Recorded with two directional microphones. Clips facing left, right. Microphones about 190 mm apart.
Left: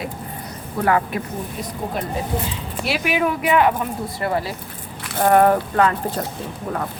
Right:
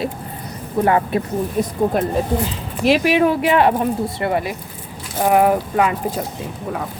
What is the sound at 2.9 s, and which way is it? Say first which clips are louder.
Speech: right 6 dB; 35° right (ahead or behind).